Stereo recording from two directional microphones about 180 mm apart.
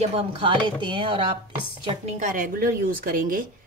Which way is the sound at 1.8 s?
40° right (ahead or behind).